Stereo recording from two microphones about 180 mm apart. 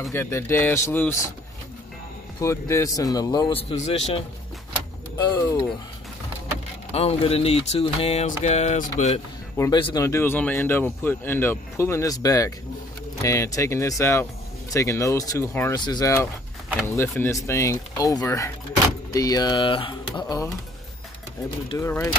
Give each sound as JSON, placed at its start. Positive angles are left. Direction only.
{"t": 0.1, "sound": "speech", "side_deg": 15}
{"t": 2.4, "sound": "speech", "side_deg": 15}
{"t": 3.7, "sound": "speech", "side_deg": 35}
{"t": 5.1, "sound": "speech", "side_deg": 20}
{"t": 6.9, "sound": "speech", "side_deg": 35}
{"t": 9.6, "sound": "speech", "side_deg": 25}
{"t": 21.6, "sound": "speech", "side_deg": 15}